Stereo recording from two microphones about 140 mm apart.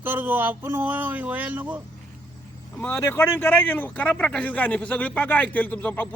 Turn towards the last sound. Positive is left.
turn(degrees=10)  # may be behind; listen again after turning